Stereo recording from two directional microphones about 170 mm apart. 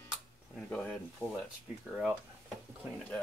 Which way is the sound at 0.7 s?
5° left (ahead or behind).